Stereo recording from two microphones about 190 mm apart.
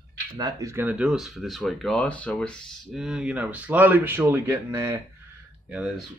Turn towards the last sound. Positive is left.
turn(degrees=-5)  # may be behind; listen again after turning